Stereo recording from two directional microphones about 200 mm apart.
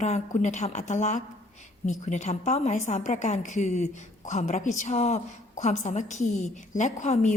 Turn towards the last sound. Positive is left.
turn(degrees=35)  # may be behind; listen again after turning